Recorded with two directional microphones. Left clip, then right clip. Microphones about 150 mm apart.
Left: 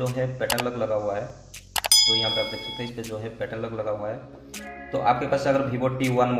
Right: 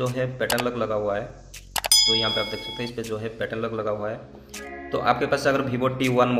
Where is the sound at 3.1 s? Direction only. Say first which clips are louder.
Right 2 dB; 25° right (ahead or behind).